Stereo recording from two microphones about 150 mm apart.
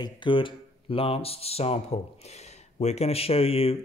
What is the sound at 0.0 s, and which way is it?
Speech, 35° left (ahead or behind).